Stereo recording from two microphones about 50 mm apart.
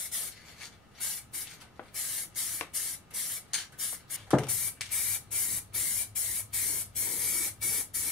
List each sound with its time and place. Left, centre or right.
0.1 s spray: centre
6.7 s spray: centre